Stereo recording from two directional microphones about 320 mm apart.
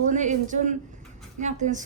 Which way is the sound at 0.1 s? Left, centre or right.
Right.